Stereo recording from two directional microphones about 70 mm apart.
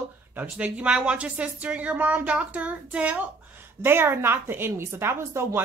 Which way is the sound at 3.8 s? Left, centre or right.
Right.